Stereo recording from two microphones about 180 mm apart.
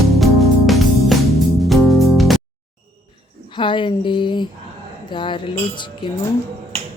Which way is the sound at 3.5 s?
25° left (ahead or behind).